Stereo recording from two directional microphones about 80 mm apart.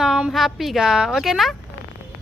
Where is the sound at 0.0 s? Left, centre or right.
Centre.